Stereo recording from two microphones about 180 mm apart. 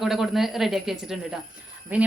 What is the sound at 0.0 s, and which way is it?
A woman's voice, centre (ahead or behind).